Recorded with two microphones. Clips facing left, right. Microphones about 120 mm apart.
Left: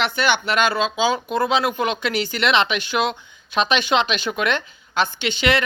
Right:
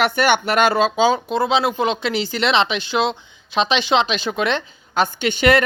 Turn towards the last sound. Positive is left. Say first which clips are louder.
# right 5 dB
turn(degrees=-45)  # may be behind; listen again after turning